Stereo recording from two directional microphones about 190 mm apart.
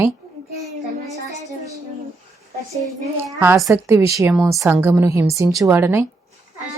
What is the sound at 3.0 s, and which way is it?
A woman's voice, 15° right (ahead or behind).